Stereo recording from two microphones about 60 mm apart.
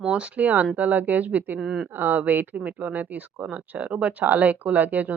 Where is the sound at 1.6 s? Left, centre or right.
Centre.